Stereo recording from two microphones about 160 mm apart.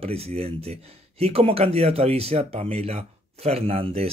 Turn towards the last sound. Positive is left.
turn(degrees=-40)  # may be behind; listen again after turning